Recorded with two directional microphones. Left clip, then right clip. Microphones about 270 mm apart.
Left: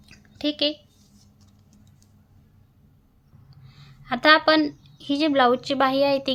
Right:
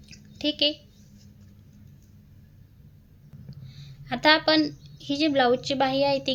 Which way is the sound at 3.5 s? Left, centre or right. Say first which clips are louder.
Right 2 dB; centre.